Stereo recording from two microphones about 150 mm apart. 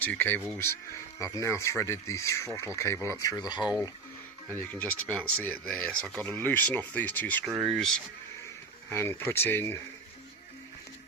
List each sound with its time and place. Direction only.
0.0 s speech: 10° left (ahead or behind); by 3.7 s 30° left (ahead or behind)
4.4 s speech: 15° left (ahead or behind)
8.9 s speech: 15° left (ahead or behind)